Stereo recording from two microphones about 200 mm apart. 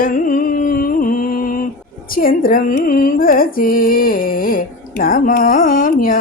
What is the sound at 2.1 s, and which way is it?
Carnatic music, 45° left (ahead or behind).